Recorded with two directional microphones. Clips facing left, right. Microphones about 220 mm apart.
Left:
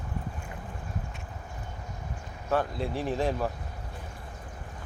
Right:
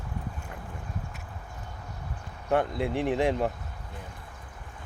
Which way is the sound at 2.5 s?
20° right (ahead or behind).